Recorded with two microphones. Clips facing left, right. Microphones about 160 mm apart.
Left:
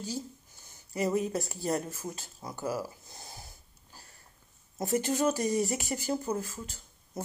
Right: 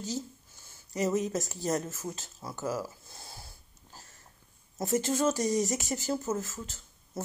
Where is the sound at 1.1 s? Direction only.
40° right (ahead or behind).